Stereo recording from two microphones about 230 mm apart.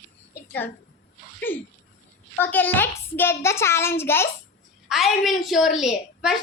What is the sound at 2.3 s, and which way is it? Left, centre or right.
A child's voice, centre.